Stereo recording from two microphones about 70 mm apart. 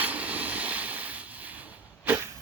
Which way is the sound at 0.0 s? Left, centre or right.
Right.